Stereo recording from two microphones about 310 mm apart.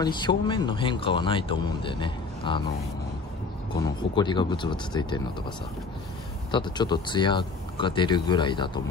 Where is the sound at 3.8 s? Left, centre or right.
Centre.